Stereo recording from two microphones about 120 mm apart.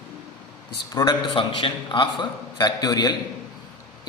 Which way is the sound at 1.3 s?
45° left (ahead or behind).